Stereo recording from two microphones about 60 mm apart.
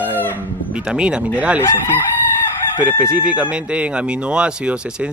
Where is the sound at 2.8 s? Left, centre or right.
Right.